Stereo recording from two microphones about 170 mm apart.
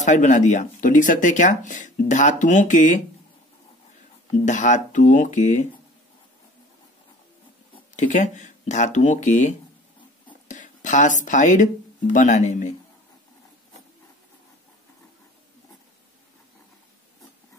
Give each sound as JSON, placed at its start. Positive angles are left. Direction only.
{"t": 0.0, "sound": "speech", "side_deg": 45}
{"t": 4.3, "sound": "speech", "side_deg": 45}
{"t": 7.9, "sound": "speech", "side_deg": 45}